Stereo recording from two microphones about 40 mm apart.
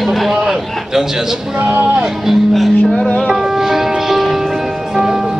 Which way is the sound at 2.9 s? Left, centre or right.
Left.